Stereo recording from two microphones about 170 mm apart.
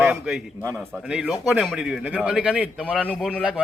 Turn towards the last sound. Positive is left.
turn(degrees=0)  # may be behind; listen again after turning